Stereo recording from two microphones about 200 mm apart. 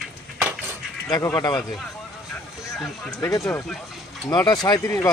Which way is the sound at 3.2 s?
15° left (ahead or behind).